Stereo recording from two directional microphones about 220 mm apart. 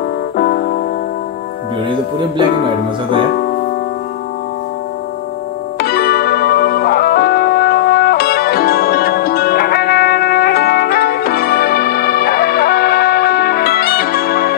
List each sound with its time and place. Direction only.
0.4 s music: 45° left (ahead or behind)
5.8 s music: 45° left (ahead or behind)